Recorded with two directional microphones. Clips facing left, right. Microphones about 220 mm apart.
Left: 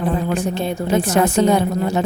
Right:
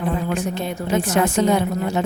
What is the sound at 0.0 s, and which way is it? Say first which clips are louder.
A woman's voice: left 3 dB; 35° left (ahead or behind).